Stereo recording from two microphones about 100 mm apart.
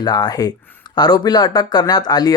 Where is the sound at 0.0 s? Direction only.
45° left (ahead or behind).